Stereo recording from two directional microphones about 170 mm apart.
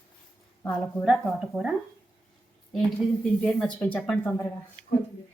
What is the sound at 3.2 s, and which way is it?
Speech, 5° left (ahead or behind).